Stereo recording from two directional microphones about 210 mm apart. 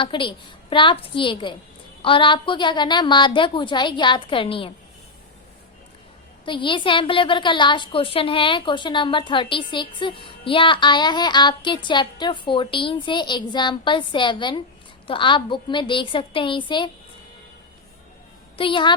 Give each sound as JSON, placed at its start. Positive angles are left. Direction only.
{"t": 0.0, "sound": "a woman's voice", "side_deg": 25}
{"t": 6.4, "sound": "a woman's voice", "side_deg": 25}
{"t": 18.5, "sound": "a woman's voice", "side_deg": 25}